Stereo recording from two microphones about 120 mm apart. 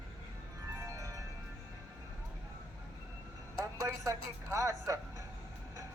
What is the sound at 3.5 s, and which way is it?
A man's voice, 30° right (ahead or behind).